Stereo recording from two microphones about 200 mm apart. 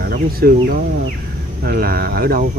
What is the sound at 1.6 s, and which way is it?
Speech, 45° right (ahead or behind).